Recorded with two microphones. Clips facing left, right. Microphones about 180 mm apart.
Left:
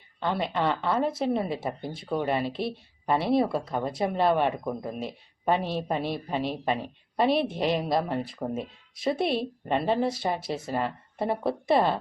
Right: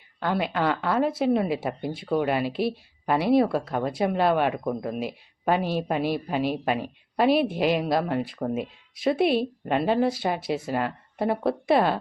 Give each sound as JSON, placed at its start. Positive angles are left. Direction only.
{"t": 0.2, "sound": "speech", "side_deg": -5}